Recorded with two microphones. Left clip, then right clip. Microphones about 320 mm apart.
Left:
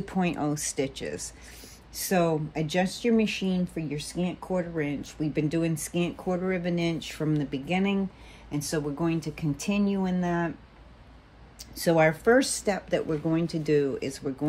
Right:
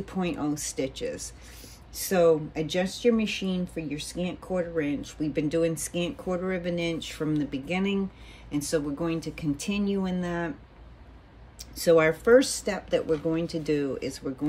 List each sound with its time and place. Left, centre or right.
0.0 s speech: left
11.7 s speech: left